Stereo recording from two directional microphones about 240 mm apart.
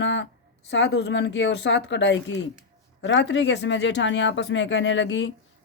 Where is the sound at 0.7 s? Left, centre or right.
Left.